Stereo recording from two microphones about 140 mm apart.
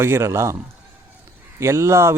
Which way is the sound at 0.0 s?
20° right (ahead or behind).